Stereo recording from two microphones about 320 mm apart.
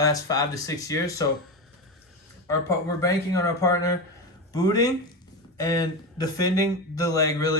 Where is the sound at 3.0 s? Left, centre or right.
Centre.